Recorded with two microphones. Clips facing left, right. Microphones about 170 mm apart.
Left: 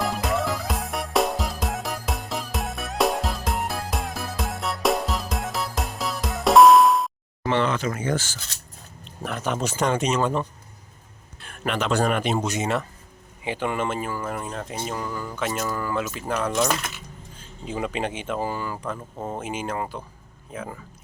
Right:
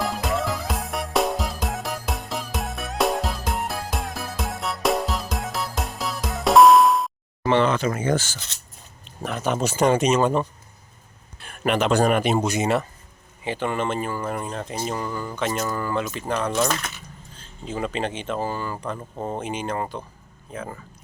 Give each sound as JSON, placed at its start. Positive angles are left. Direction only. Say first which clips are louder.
{"t": 0.0, "sound": "music", "louder": "even", "side_deg": 0}
{"t": 7.4, "sound": "speech", "louder": "right 3 dB", "side_deg": -25}
{"t": 9.0, "sound": "speech", "louder": "right 2 dB", "side_deg": 0}
{"t": 10.0, "sound": "speech", "louder": "right 4 dB", "side_deg": -20}
{"t": 11.3, "sound": "a sound", "louder": "right 5 dB", "side_deg": -10}
{"t": 12.0, "sound": "speech", "louder": "right 3 dB", "side_deg": -10}
{"t": 13.4, "sound": "speech", "louder": "right 1 dB", "side_deg": 10}
{"t": 19.1, "sound": "speech", "louder": "right 5 dB", "side_deg": -10}
{"t": 19.4, "sound": "speech", "louder": "even", "side_deg": 5}